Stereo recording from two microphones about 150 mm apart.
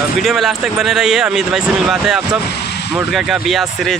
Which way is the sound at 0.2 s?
Centre (ahead or behind).